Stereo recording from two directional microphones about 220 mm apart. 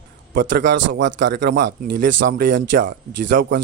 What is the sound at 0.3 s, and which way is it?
Speech, 45° right (ahead or behind).